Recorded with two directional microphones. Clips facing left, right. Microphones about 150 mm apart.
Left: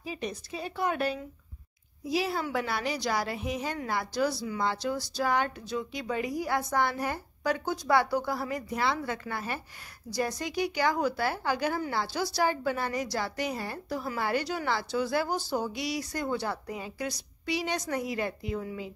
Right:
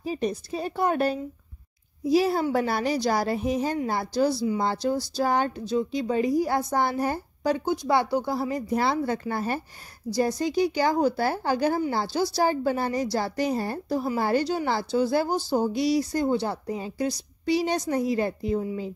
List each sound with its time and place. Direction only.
0.0 s a woman's voice: 40° right (ahead or behind)